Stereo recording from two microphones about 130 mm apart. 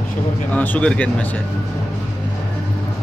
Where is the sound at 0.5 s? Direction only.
15° left (ahead or behind).